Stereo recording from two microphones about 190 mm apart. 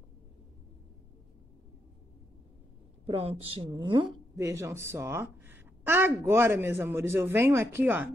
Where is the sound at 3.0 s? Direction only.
30° right (ahead or behind).